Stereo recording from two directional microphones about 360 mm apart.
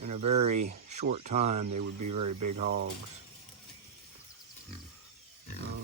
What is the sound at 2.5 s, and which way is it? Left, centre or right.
Speech, right.